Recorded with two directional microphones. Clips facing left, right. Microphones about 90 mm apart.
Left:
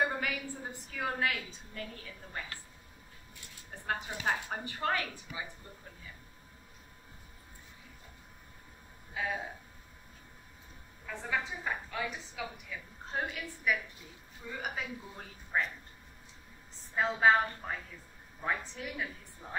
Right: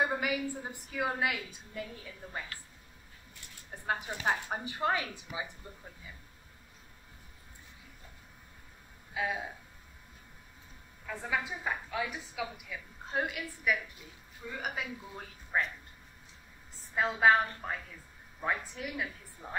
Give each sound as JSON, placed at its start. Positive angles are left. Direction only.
{"t": 0.2, "sound": "a woman's voice", "side_deg": -15}
{"t": 3.8, "sound": "a woman's voice", "side_deg": -15}
{"t": 9.1, "sound": "speech", "side_deg": -10}
{"t": 11.1, "sound": "a woman's voice", "side_deg": -10}
{"t": 16.9, "sound": "a woman's voice", "side_deg": 0}